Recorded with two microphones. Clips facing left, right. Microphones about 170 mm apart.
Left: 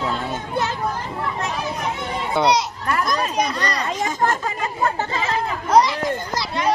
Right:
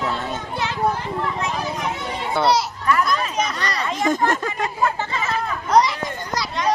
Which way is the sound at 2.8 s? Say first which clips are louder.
Right 1 dB; 40° left (ahead or behind).